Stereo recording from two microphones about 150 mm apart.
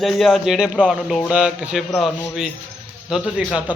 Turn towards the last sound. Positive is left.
turn(degrees=0)  # may be behind; listen again after turning